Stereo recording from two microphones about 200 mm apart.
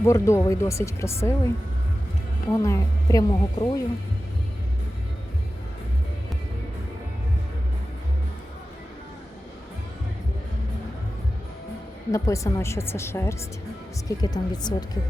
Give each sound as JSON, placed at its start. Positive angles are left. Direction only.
{"t": 0.0, "sound": "speech", "side_deg": 15}
{"t": 2.5, "sound": "speech", "side_deg": 15}
{"t": 12.1, "sound": "speech", "side_deg": 15}